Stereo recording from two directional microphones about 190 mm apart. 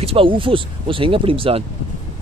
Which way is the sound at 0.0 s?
30° right (ahead or behind).